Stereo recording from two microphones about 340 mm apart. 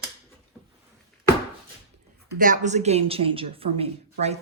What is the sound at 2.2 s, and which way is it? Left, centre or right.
A woman's voice, right.